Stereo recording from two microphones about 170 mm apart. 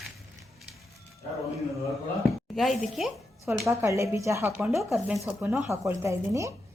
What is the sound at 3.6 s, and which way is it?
Speech, 15° right (ahead or behind).